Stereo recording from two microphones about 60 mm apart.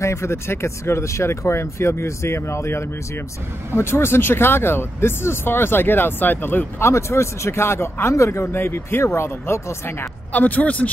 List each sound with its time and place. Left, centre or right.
0.0 s speech: left
6.8 s speech: left
10.3 s speech: left